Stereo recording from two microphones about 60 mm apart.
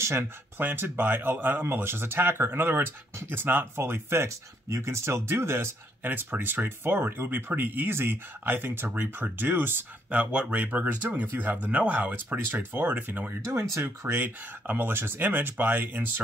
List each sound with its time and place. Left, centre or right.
0.6 s speech: right
4.3 s speech: right
6.0 s speech: right
13.5 s speech: right
14.2 s speech: right